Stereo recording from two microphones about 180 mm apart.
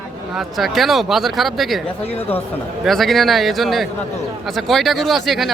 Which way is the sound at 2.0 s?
35° left (ahead or behind).